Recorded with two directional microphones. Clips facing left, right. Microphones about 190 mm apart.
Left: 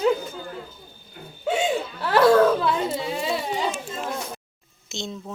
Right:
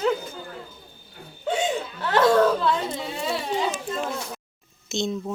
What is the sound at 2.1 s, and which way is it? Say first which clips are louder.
Speech: left 2 dB; 5° left (ahead or behind).